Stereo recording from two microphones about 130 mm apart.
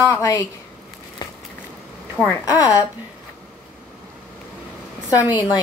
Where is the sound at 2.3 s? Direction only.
25° left (ahead or behind).